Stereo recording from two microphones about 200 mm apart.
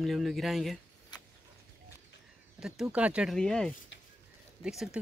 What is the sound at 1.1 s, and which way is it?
Vehicle, 20° left (ahead or behind).